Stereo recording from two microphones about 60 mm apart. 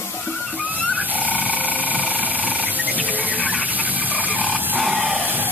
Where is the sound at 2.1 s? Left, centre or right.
Right.